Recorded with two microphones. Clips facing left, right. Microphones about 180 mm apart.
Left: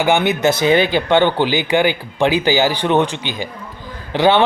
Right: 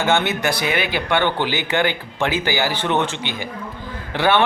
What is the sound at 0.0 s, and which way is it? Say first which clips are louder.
A man's voice: left 5 dB; 15° left (ahead or behind).